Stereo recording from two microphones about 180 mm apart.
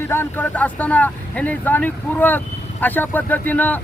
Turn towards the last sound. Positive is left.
turn(degrees=10)  # may be behind; listen again after turning